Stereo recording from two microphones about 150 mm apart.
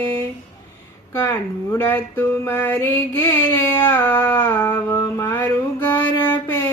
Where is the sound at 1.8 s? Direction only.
15° left (ahead or behind).